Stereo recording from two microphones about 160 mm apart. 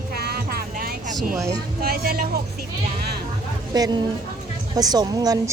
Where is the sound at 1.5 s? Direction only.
70° right (ahead or behind).